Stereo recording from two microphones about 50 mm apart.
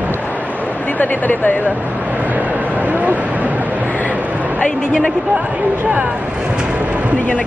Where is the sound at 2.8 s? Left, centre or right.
Right.